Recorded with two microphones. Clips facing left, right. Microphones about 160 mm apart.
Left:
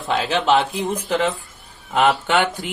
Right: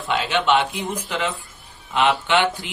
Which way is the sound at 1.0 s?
40° left (ahead or behind).